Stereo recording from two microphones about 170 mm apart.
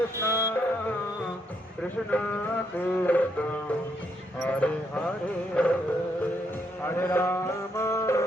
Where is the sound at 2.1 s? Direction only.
10° left (ahead or behind).